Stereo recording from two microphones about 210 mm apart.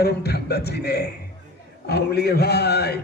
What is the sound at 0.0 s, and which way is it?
A man's voice, 50° left (ahead or behind).